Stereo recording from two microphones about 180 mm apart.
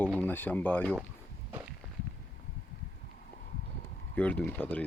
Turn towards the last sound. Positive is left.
turn(degrees=10)  # may be behind; listen again after turning